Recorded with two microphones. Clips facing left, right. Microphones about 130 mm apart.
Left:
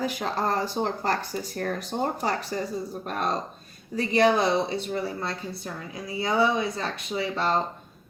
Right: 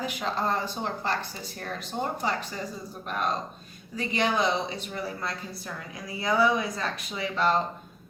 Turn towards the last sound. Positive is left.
turn(degrees=30)  # may be behind; listen again after turning